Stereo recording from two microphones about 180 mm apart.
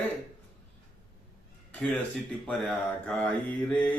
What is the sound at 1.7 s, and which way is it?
A man's voice, 5° left (ahead or behind).